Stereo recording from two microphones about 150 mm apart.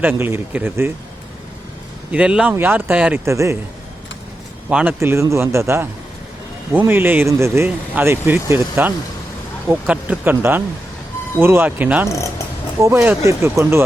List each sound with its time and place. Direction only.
0.0 s speech: 15° right (ahead or behind)
2.1 s speech: 5° right (ahead or behind)
3.2 s a man's voice: 20° right (ahead or behind)
4.7 s speech: 5° right (ahead or behind)
4.9 s speech: 20° right (ahead or behind)
12.0 s speech: 20° left (ahead or behind)
12.8 s speech: 15° right (ahead or behind)